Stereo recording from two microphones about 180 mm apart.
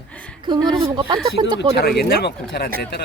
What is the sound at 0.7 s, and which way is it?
Speech, 25° right (ahead or behind).